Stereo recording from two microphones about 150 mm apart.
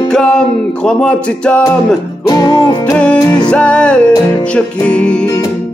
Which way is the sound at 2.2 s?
25° left (ahead or behind).